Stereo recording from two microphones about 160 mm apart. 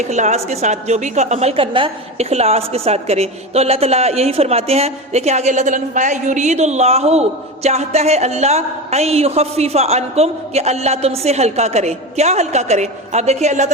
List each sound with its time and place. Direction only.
0.0 s a woman's voice: 45° right (ahead or behind)